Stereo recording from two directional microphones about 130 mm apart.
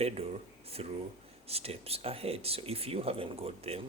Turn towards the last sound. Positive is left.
turn(degrees=-50)  # may be behind; listen again after turning